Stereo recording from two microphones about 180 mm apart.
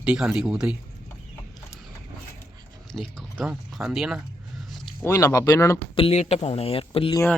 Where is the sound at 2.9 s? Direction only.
Centre (ahead or behind).